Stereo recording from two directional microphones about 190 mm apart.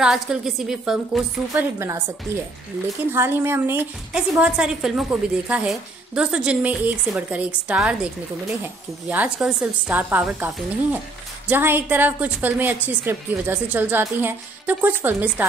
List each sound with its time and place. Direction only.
0.0 s a woman's voice: 5° right (ahead or behind)
1.5 s a woman's voice: 15° right (ahead or behind)
3.1 s a woman's voice: 10° right (ahead or behind)
9.1 s a woman's voice: 5° right (ahead or behind)